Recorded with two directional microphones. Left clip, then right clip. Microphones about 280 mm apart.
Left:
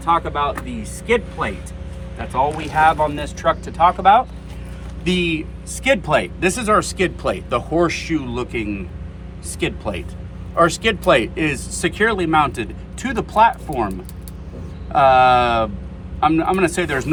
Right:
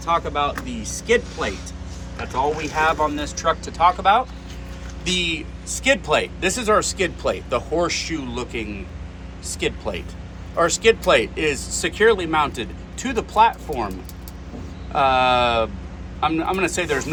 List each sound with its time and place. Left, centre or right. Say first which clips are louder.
0.0 s speech: left 3 dB; left
2.4 s speech: left 5 dB; left
14.9 s speech: left 5 dB; left